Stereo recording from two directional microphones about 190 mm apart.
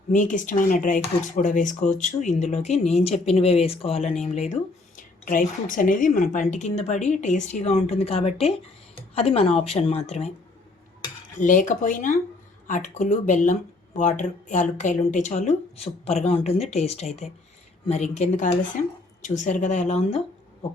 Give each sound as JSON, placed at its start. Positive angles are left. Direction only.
{"t": 0.1, "sound": "speech", "side_deg": 40}
{"t": 11.3, "sound": "speech", "side_deg": 45}